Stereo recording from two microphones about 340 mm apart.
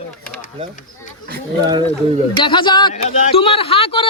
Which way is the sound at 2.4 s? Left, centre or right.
Centre.